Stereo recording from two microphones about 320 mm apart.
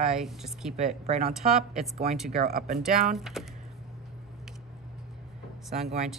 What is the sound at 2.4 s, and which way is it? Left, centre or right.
Speech, right.